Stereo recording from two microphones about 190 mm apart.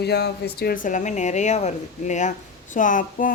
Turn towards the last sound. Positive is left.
turn(degrees=45)  # may be behind; listen again after turning